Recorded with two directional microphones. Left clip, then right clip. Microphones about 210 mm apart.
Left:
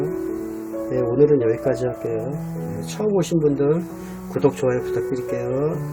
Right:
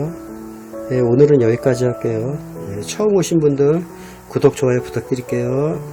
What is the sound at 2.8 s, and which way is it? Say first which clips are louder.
Speech: right 6 dB; 40° right (ahead or behind).